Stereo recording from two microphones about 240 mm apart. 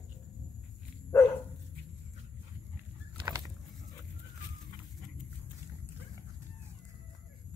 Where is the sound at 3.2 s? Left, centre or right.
Centre.